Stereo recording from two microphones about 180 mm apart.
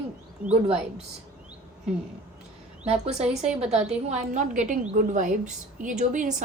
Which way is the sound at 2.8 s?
35° right (ahead or behind).